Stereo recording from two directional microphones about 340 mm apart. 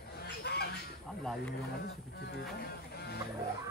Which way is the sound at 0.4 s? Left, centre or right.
Left.